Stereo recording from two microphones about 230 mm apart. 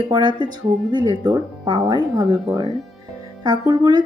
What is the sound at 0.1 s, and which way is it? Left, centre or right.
Speech, centre.